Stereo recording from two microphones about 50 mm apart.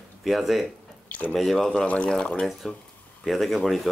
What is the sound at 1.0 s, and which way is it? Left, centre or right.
Drip, left.